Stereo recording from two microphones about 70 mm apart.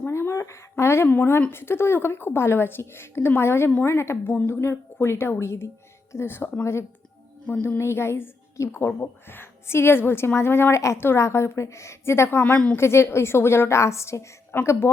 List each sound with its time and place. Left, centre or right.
0.1 s a sound: left
1.0 s a woman's voice: left
8.9 s a woman's voice: left